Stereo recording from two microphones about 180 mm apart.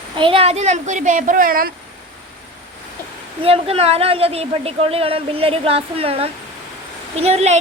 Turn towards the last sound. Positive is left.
turn(degrees=-35)  # may be behind; listen again after turning